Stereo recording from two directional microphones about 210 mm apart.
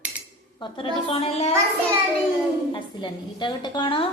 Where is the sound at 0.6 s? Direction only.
25° left (ahead or behind).